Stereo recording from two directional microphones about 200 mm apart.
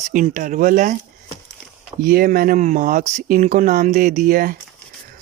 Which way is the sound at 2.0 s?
45° right (ahead or behind).